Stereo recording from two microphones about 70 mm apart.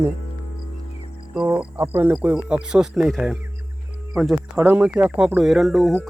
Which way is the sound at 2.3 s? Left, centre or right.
Centre.